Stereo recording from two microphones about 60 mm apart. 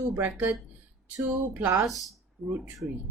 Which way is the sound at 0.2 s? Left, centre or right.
Right.